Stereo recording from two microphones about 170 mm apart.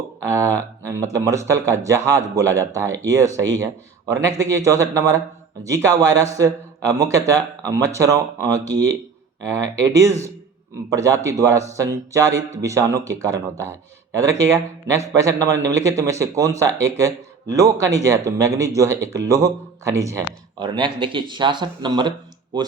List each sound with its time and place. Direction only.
0.2 s speech: 20° right (ahead or behind)